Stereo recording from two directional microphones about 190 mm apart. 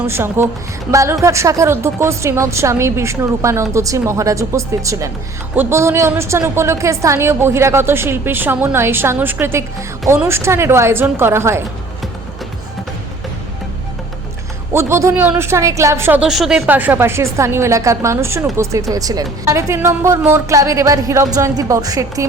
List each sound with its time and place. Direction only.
0.1 s a woman's voice: 15° right (ahead or behind)
14.7 s a woman's voice: 15° right (ahead or behind)